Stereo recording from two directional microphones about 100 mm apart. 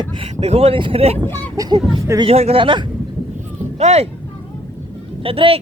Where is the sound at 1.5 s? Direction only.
35° right (ahead or behind).